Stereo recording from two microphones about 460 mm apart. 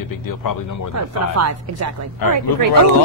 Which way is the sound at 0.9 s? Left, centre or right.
Right.